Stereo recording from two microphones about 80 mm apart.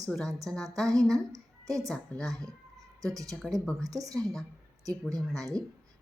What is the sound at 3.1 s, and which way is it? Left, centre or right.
Speech, right.